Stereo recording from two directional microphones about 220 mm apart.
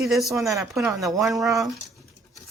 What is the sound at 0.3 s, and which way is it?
Speech, 15° right (ahead or behind).